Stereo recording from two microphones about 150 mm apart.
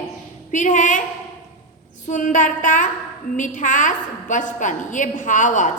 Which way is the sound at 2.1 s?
55° left (ahead or behind).